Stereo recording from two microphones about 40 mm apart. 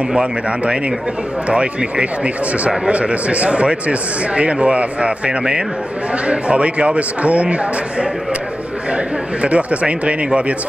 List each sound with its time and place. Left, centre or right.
0.2 s a man's voice: right